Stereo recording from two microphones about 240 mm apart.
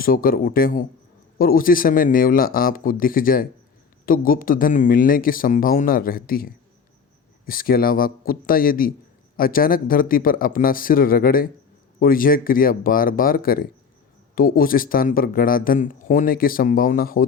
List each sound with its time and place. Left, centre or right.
0.0 s speech: left